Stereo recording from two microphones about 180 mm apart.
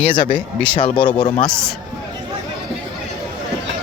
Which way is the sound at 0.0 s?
5° left (ahead or behind).